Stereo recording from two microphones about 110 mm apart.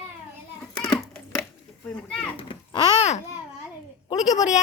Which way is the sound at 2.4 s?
50° left (ahead or behind).